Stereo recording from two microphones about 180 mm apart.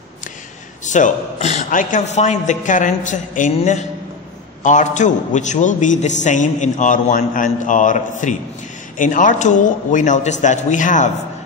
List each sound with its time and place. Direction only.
0.8 s a man's voice: 45° left (ahead or behind)